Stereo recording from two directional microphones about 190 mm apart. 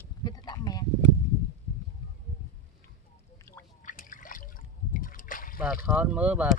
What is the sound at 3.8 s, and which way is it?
Trickle, 45° left (ahead or behind).